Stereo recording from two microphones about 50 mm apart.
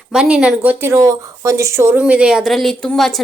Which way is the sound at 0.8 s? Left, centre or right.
Right.